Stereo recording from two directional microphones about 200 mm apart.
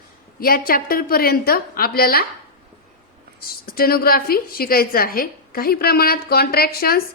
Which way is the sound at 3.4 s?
50° left (ahead or behind).